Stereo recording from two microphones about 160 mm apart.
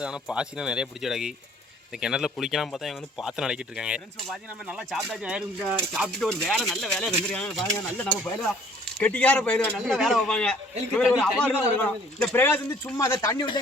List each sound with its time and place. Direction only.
0.0 s a man's voice: 5° right (ahead or behind); by 12.9 s 15° left (ahead or behind)
13.0 s speech: 25° left (ahead or behind)